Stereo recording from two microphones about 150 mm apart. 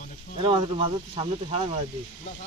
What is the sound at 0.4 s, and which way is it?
Speech, 35° right (ahead or behind).